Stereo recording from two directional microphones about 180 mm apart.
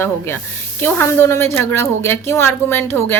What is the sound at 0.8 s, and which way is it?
A woman's voice, 10° left (ahead or behind).